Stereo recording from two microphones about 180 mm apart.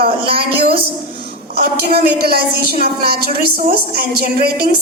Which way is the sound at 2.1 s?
60° right (ahead or behind).